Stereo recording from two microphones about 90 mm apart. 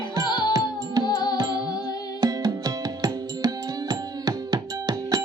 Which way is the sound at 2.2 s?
50° right (ahead or behind).